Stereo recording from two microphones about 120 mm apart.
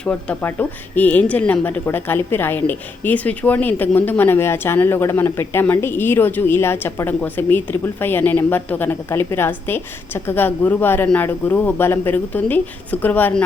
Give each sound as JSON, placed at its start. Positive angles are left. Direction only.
{"t": 0.0, "sound": "speech", "side_deg": 10}